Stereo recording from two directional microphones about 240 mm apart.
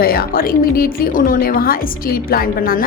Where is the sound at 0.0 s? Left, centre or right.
Left.